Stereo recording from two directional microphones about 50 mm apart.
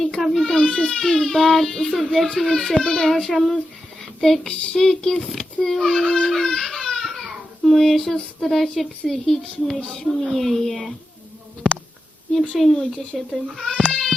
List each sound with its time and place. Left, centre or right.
0.0 s goat: centre
0.3 s a child's voice: centre
3.2 s a woman's voice: centre
4.4 s a sound: centre
4.9 s a child's voice: centre
5.6 s a sound: left
5.9 s a child's voice: centre
12.5 s a woman's voice: centre
13.8 s a sound: centre